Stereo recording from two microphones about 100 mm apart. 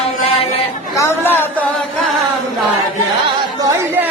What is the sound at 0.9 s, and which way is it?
Chatter, 25° left (ahead or behind).